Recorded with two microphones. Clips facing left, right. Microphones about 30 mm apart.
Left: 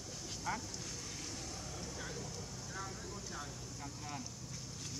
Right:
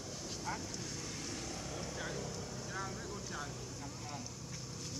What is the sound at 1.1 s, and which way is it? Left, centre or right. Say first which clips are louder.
Vehicle: right 3 dB; right.